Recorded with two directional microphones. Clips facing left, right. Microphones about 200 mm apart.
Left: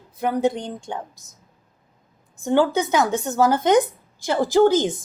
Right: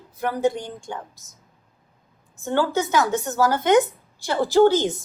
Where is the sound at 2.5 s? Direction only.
15° left (ahead or behind).